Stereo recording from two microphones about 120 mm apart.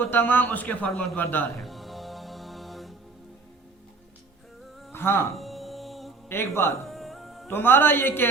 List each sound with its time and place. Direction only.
0.0 s a man's voice: 15° left (ahead or behind)
1.5 s music: centre (ahead or behind)
4.9 s speech: 20° left (ahead or behind)
5.4 s music: centre (ahead or behind)
6.2 s a man's voice: 20° left (ahead or behind)
6.8 s music: centre (ahead or behind)
7.5 s a man's voice: 15° left (ahead or behind)